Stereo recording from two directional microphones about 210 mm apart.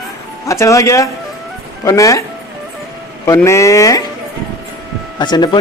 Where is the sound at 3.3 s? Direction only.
15° left (ahead or behind).